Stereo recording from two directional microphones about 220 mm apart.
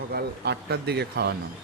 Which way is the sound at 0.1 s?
50° right (ahead or behind).